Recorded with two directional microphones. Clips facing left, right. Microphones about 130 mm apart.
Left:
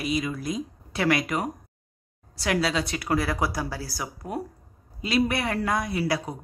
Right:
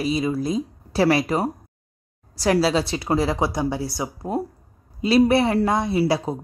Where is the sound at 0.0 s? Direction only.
30° right (ahead or behind).